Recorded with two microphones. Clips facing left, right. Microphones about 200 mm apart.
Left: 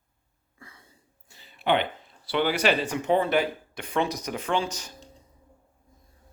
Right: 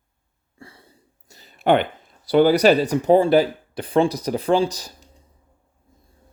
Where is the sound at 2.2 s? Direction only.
40° right (ahead or behind).